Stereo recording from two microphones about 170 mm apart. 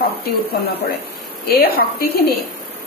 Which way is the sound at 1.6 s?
65° left (ahead or behind).